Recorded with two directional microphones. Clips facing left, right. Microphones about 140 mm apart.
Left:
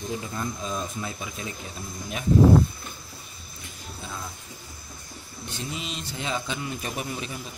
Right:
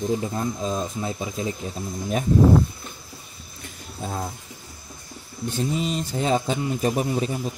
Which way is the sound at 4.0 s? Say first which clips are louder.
Right 8 dB; 45° right (ahead or behind).